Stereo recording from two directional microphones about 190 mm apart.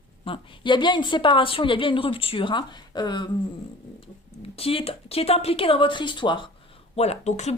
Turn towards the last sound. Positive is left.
turn(degrees=35)  # may be behind; listen again after turning